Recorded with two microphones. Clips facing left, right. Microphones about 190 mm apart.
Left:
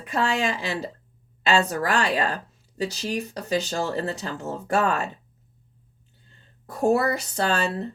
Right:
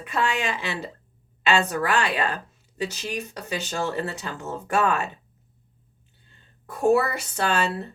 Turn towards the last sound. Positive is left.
turn(degrees=35)  # may be behind; listen again after turning